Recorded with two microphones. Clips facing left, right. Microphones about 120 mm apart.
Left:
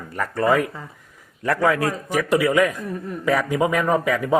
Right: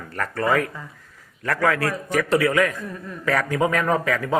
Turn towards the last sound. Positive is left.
turn(degrees=15)  # may be behind; listen again after turning